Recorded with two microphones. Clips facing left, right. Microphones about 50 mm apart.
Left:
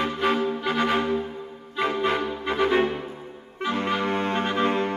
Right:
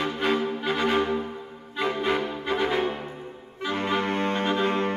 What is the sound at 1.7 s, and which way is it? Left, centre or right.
Music, centre.